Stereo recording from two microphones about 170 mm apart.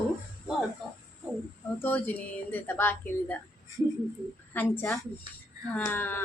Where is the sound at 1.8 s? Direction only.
10° left (ahead or behind).